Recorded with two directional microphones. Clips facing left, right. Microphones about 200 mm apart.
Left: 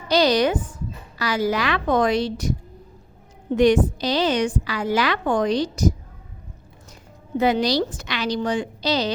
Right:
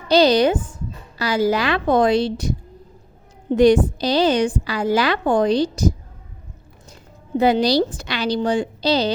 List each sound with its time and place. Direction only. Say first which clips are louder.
0.1 s a woman's voice: right 4 dB; 30° right (ahead or behind)
7.3 s a woman's voice: right 3 dB; 35° right (ahead or behind)